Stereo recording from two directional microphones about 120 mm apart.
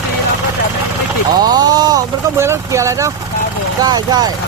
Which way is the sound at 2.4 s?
25° right (ahead or behind).